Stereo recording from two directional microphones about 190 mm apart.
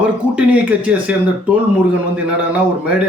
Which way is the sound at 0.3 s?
5° right (ahead or behind).